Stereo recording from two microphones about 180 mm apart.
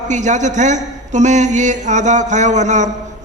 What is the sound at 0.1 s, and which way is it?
Speech, 40° right (ahead or behind).